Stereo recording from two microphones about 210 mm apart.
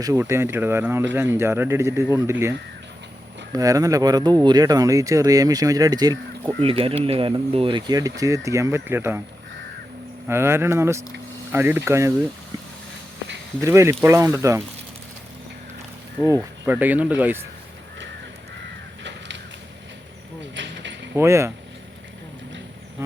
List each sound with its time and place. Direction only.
0.0 s speech: 15° right (ahead or behind)
3.5 s speech: 15° right (ahead or behind)
10.2 s speech: 10° right (ahead or behind)
13.6 s speech: 15° right (ahead or behind)
16.2 s speech: 15° right (ahead or behind)
20.4 s a sound: 60° right (ahead or behind)
21.2 s speech: 15° right (ahead or behind)